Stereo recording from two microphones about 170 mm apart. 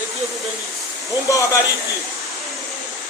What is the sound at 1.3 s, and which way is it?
Speech, 20° left (ahead or behind).